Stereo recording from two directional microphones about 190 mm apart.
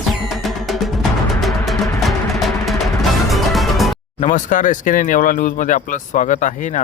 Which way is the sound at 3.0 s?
Centre (ahead or behind).